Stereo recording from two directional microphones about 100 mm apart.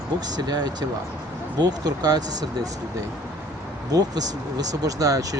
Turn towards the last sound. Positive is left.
turn(degrees=-35)  # may be behind; listen again after turning